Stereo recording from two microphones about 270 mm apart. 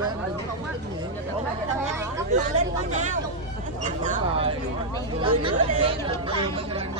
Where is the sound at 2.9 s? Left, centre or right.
Right.